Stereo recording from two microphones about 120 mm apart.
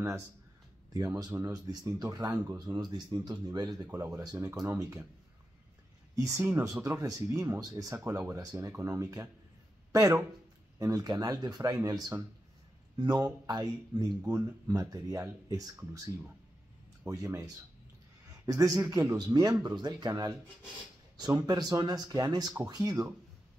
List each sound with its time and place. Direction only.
0.9 s speech: 30° right (ahead or behind)
6.1 s speech: 25° right (ahead or behind)
17.0 s speech: 25° right (ahead or behind)
21.2 s speech: 30° right (ahead or behind)